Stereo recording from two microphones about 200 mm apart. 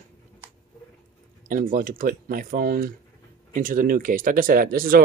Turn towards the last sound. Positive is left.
turn(degrees=-45)  # may be behind; listen again after turning